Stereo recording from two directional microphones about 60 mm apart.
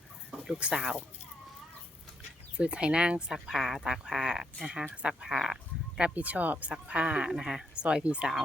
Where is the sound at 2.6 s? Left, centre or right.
Centre.